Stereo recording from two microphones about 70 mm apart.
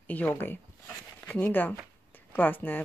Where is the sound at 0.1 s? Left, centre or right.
Left.